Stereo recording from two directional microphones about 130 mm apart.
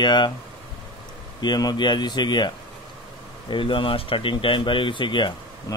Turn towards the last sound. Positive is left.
turn(degrees=35)  # may be behind; listen again after turning